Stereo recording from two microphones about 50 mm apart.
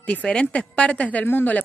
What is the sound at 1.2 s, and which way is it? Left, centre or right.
Speech, left.